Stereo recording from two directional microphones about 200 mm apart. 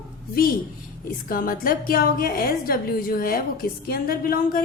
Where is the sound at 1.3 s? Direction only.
45° left (ahead or behind).